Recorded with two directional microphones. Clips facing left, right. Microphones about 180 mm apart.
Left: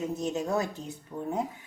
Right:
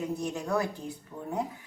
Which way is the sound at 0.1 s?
20° left (ahead or behind).